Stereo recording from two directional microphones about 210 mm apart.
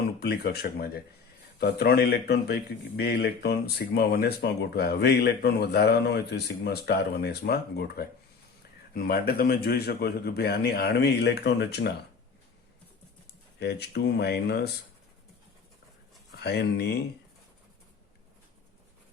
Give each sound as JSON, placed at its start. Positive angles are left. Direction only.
{"t": 0.2, "sound": "a man's voice", "side_deg": 50}
{"t": 13.6, "sound": "a man's voice", "side_deg": 50}
{"t": 16.4, "sound": "a man's voice", "side_deg": 50}